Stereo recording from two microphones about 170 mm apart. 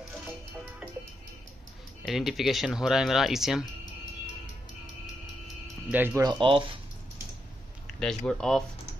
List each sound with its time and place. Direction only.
2.0 s speech: centre (ahead or behind)
5.9 s speech: 10° right (ahead or behind)
6.3 s speech: 30° right (ahead or behind)
7.8 s a sound: 5° left (ahead or behind)
8.3 s speech: 5° left (ahead or behind)